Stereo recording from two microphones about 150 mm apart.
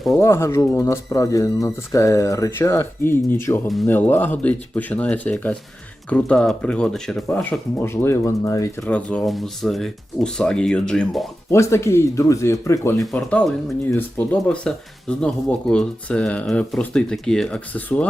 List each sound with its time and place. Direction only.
0.2 s speech: 15° left (ahead or behind)
7.9 s speech: 15° left (ahead or behind)
8.8 s speech: 10° left (ahead or behind)
11.5 s speech: 20° left (ahead or behind)
13.1 s speech: 5° left (ahead or behind)